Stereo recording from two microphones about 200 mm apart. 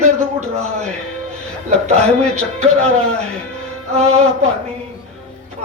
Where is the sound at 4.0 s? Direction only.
35° right (ahead or behind).